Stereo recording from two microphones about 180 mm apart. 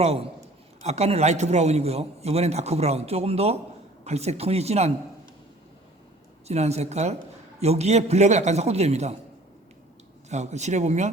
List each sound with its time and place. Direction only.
0.0 s a man's voice: 35° right (ahead or behind)
6.5 s a man's voice: 35° right (ahead or behind)
10.2 s a man's voice: 40° right (ahead or behind)